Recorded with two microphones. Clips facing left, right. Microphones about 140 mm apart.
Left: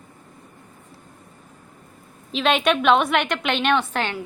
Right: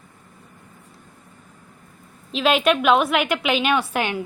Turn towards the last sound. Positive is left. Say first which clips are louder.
# right 1 dB
turn(degrees=-15)  # may be behind; listen again after turning